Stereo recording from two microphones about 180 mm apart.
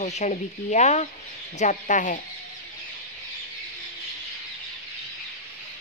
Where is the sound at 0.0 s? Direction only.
40° left (ahead or behind).